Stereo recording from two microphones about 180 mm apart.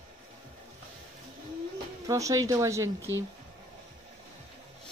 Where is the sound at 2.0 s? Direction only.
20° right (ahead or behind).